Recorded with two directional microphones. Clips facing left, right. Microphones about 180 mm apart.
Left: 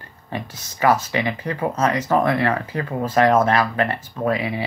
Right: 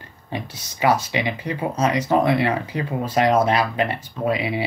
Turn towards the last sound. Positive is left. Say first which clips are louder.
# even
turn(degrees=-15)  # may be behind; listen again after turning